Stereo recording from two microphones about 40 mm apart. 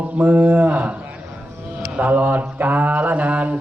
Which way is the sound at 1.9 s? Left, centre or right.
Right.